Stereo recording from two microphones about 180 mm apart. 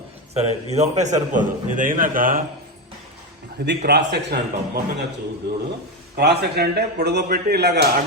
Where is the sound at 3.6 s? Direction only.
70° right (ahead or behind).